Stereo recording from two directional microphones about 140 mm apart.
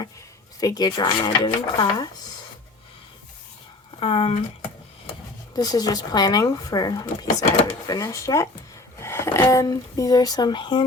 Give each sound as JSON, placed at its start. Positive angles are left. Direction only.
{"t": 0.6, "sound": "speech", "side_deg": 25}
{"t": 4.0, "sound": "speech", "side_deg": 45}
{"t": 5.5, "sound": "speech", "side_deg": 25}